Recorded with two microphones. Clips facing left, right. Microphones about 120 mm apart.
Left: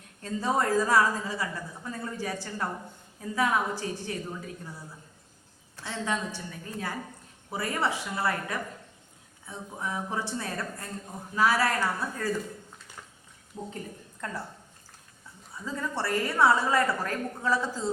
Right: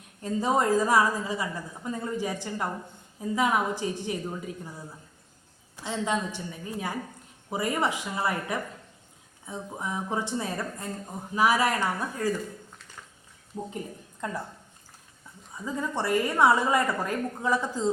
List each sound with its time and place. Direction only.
0.2 s a woman's voice: 15° right (ahead or behind)
5.7 s a woman's voice: 15° right (ahead or behind)
14.2 s a woman's voice: 15° right (ahead or behind)
15.5 s a woman's voice: 15° right (ahead or behind)